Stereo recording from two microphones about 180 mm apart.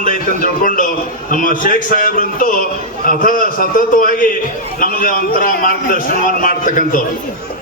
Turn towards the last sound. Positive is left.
turn(degrees=50)  # may be behind; listen again after turning